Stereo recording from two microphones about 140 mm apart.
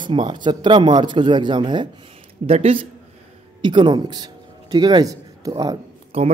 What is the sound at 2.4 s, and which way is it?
Speech, 45° right (ahead or behind).